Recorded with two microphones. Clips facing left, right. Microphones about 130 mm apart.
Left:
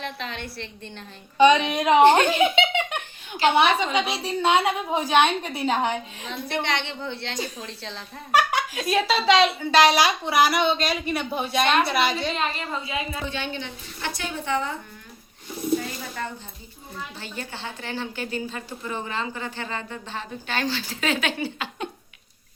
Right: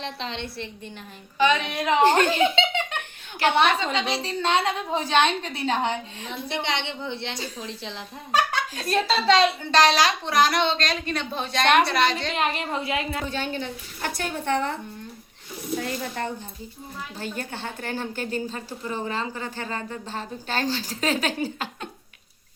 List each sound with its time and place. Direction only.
0.0 s a woman's voice: 30° right (ahead or behind)
1.4 s a woman's voice: 20° left (ahead or behind)
3.0 s chuckle: 60° right (ahead or behind)
3.8 s a woman's voice: 10° left (ahead or behind)
6.3 s a woman's voice: 20° right (ahead or behind)
7.3 s a woman's voice: 15° left (ahead or behind)
7.6 s a woman's voice: 15° right (ahead or behind)
8.3 s a sound: 15° left (ahead or behind)
8.9 s a woman's voice: 5° left (ahead or behind)
12.3 s a woman's voice: 65° right (ahead or behind)
13.2 s a woman's voice: 40° right (ahead or behind); by 14.8 s 60° right (ahead or behind)
15.8 s a woman's voice: 60° right (ahead or behind)
17.2 s a woman's voice: 45° right (ahead or behind)